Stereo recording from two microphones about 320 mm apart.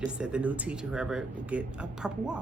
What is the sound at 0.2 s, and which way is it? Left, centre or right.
Speech, centre.